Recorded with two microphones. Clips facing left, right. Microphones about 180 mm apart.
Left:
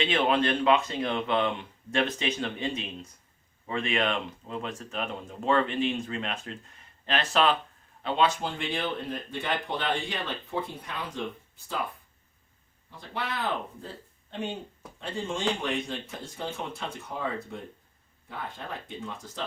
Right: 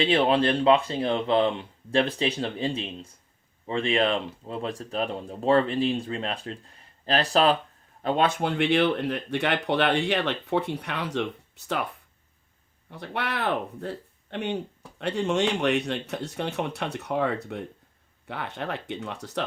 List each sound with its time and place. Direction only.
0.0 s speech: 35° right (ahead or behind)
8.0 s speech: 50° right (ahead or behind); by 11.9 s 75° right (ahead or behind)
12.9 s speech: 65° right (ahead or behind)